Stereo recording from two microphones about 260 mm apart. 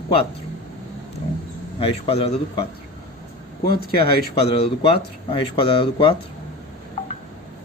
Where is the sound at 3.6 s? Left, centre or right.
Left.